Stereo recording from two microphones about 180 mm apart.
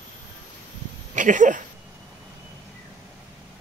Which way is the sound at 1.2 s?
45° right (ahead or behind).